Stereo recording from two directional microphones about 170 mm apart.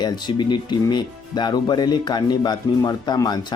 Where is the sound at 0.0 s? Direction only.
25° left (ahead or behind).